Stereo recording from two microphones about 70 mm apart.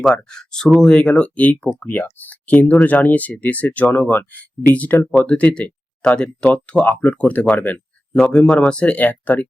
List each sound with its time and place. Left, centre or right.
0.0 s speech: centre; by 9.5 s left